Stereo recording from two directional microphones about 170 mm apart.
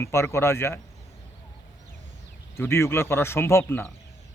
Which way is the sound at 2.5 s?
15° left (ahead or behind).